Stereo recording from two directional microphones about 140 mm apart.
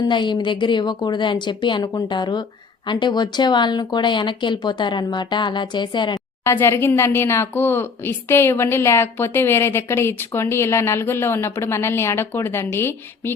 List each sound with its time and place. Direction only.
0.0 s speech: 35° left (ahead or behind)
6.4 s a woman's voice: 20° left (ahead or behind)